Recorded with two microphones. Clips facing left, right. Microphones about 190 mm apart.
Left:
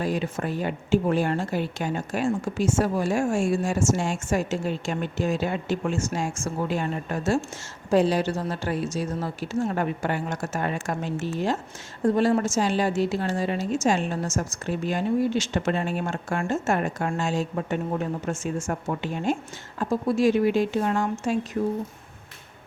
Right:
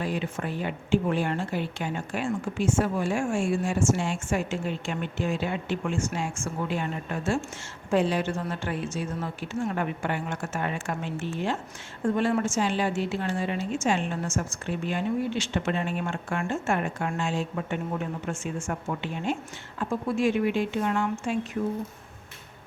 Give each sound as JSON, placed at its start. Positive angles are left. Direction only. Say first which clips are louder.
{"t": 0.0, "sound": "a woman's voice", "louder": "left 3 dB", "side_deg": 40}